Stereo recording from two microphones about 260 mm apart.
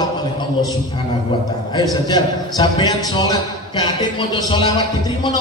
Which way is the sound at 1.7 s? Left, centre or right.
Centre.